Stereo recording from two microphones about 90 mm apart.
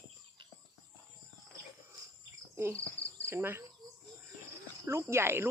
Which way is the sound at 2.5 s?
30° right (ahead or behind).